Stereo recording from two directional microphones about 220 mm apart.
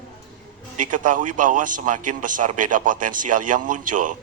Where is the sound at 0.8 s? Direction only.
35° right (ahead or behind).